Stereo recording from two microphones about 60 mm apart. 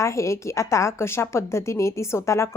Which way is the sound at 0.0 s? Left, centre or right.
Left.